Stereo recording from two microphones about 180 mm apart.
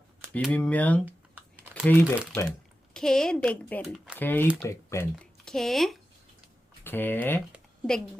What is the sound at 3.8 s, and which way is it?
Speech, 5° right (ahead or behind).